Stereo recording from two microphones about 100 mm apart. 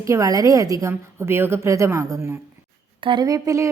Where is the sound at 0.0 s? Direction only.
35° right (ahead or behind).